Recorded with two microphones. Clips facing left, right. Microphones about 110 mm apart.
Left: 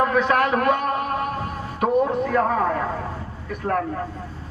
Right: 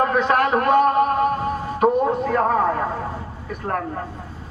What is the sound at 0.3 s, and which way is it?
Speech, 30° right (ahead or behind).